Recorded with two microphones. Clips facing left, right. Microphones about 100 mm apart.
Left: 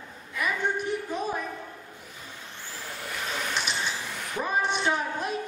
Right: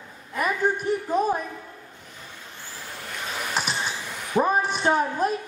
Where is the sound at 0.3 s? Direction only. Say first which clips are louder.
Right 4 dB; 40° right (ahead or behind).